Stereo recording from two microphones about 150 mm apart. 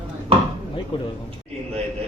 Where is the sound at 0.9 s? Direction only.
35° left (ahead or behind).